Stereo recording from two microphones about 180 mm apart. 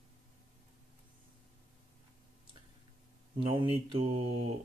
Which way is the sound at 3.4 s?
30° right (ahead or behind).